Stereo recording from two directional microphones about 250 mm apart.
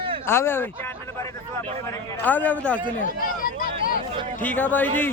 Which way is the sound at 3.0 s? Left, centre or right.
Left.